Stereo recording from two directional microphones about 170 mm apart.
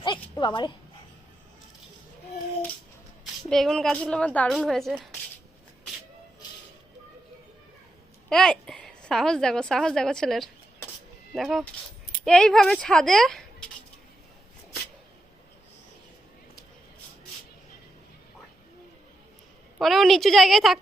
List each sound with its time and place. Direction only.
0.0 s a sound: 25° left (ahead or behind)
3.5 s a woman's voice: 5° left (ahead or behind)
8.3 s a woman's voice: 5° left (ahead or behind)
19.8 s a woman's voice: centre (ahead or behind)